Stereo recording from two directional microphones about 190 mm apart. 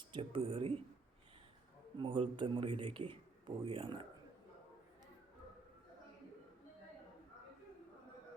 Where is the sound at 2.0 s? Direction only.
25° right (ahead or behind).